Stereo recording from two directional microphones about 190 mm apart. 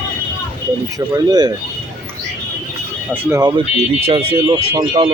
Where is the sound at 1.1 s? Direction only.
20° right (ahead or behind).